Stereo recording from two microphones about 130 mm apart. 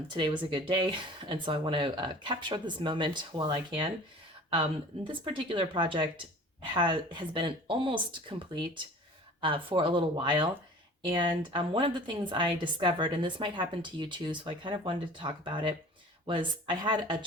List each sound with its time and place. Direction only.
0.5 s a woman's voice: 40° right (ahead or behind)